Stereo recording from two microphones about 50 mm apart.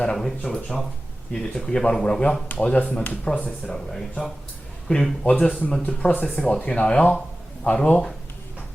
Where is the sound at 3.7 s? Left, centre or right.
Centre.